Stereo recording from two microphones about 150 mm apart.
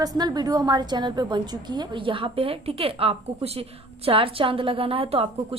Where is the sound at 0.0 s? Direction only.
25° right (ahead or behind).